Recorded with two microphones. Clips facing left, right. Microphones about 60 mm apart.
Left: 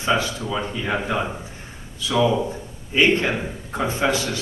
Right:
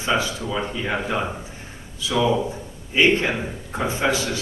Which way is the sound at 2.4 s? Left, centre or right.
Centre.